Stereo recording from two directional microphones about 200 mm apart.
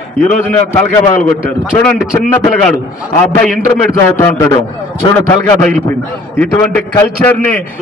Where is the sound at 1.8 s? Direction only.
5° left (ahead or behind).